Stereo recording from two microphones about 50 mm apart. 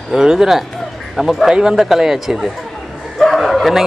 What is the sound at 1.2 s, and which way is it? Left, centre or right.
Speech, centre.